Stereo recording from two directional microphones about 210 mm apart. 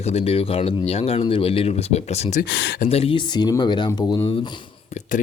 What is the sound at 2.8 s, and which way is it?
Speech, 30° left (ahead or behind).